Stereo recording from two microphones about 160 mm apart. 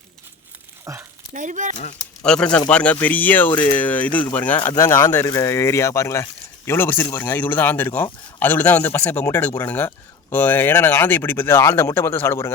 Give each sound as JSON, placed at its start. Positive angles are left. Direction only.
{"t": 0.9, "sound": "speech", "side_deg": -20}
{"t": 1.3, "sound": "speech", "side_deg": -55}
{"t": 2.2, "sound": "speech", "side_deg": 5}
{"t": 3.5, "sound": "speech", "side_deg": 30}
{"t": 3.8, "sound": "speech", "side_deg": 10}